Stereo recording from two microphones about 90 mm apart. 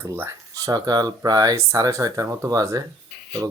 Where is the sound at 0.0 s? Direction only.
30° right (ahead or behind).